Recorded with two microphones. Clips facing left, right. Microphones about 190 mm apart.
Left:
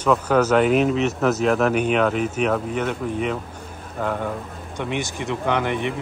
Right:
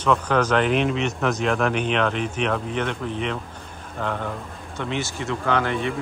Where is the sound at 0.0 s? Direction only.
5° left (ahead or behind).